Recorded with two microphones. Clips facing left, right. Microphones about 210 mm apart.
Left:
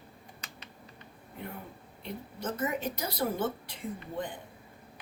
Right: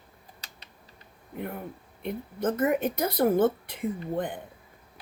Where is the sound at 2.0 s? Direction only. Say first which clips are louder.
Right 8 dB; 55° right (ahead or behind).